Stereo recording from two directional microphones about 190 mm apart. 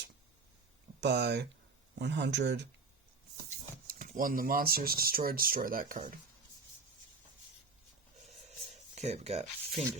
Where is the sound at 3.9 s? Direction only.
45° right (ahead or behind).